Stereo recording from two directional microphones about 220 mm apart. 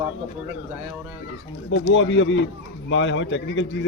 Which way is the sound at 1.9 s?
55° left (ahead or behind).